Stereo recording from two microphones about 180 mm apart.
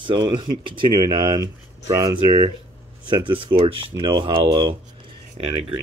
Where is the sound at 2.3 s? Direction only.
30° right (ahead or behind).